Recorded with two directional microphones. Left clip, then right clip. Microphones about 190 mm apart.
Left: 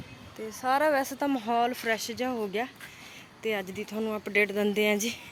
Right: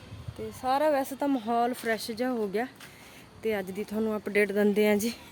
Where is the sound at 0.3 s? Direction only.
5° right (ahead or behind); by 5.2 s 35° right (ahead or behind).